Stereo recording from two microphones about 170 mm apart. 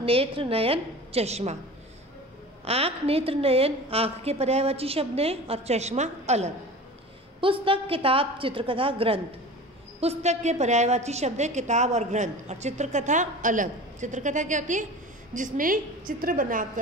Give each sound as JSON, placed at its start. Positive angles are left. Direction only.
{"t": 0.0, "sound": "a woman's voice", "side_deg": -35}
{"t": 2.6, "sound": "a woman's voice", "side_deg": -35}